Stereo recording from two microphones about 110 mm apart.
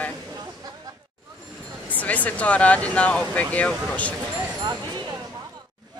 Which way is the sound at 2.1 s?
15° left (ahead or behind).